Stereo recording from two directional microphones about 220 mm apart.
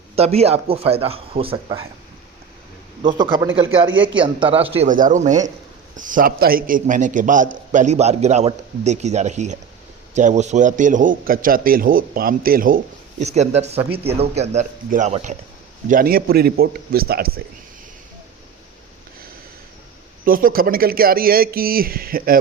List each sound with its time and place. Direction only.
0.2 s speech: 30° right (ahead or behind)
3.0 s speech: 20° right (ahead or behind)
3.8 s a man's voice: 60° right (ahead or behind)
4.2 s a man's voice: 25° right (ahead or behind); by 17.4 s 45° right (ahead or behind)
20.2 s a man's voice: 40° right (ahead or behind)